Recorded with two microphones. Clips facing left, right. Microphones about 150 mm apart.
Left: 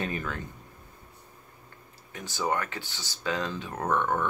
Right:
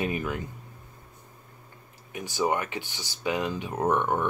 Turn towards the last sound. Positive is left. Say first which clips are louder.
# right 2 dB
turn(degrees=-15)  # may be behind; listen again after turning